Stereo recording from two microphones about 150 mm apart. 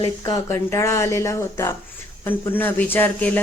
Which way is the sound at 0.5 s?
20° left (ahead or behind).